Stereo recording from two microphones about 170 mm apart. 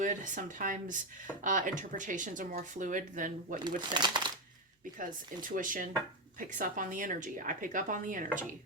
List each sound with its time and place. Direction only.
0.0 s speech: 50° right (ahead or behind)
3.8 s speech: 25° right (ahead or behind)
4.9 s speech: 50° right (ahead or behind)